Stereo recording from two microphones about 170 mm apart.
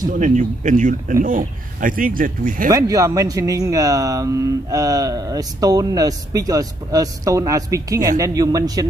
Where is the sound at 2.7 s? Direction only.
20° right (ahead or behind).